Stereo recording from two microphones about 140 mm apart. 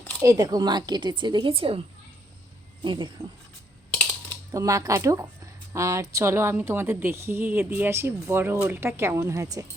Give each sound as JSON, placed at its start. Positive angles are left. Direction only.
{"t": 0.2, "sound": "speech", "side_deg": -25}
{"t": 2.8, "sound": "speech", "side_deg": -35}
{"t": 4.5, "sound": "a woman's voice", "side_deg": -25}